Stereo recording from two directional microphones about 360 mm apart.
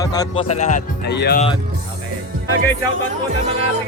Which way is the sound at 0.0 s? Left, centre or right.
Centre.